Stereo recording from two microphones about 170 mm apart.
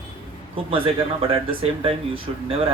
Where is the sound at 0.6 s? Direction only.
35° right (ahead or behind).